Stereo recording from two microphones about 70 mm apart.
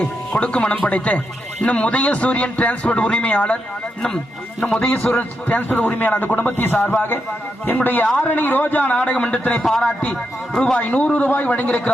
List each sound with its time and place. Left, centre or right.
0.0 s speech: centre
4.6 s a man's voice: left
9.6 s a man's voice: centre; by 11.7 s left